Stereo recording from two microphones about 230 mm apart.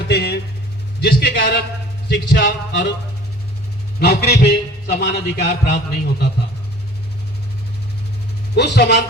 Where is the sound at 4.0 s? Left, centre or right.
Left.